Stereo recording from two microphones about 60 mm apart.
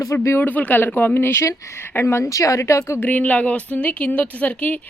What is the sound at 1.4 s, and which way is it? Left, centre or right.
Speech, left.